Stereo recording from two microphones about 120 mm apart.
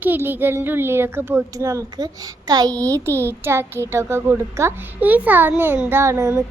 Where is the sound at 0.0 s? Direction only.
15° right (ahead or behind).